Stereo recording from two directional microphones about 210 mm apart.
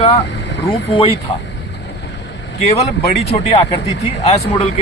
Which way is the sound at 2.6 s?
30° left (ahead or behind).